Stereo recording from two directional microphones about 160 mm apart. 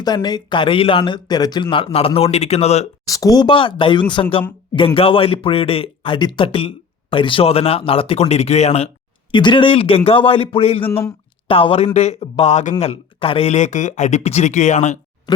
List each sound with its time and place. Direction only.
0.0 s speech: 25° left (ahead or behind); by 2.8 s 40° left (ahead or behind)
3.1 s speech: 20° left (ahead or behind); by 8.9 s 40° left (ahead or behind)
9.3 s speech: 30° left (ahead or behind)
10.8 s speech: 15° left (ahead or behind)
11.4 s speech: 35° left (ahead or behind)